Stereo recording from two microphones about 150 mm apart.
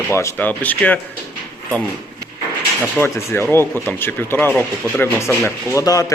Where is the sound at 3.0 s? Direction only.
15° left (ahead or behind).